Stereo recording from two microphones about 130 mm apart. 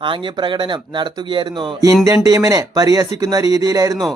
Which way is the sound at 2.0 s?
25° right (ahead or behind).